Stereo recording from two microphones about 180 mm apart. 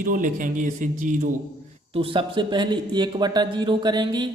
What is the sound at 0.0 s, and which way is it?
Speech, 50° right (ahead or behind).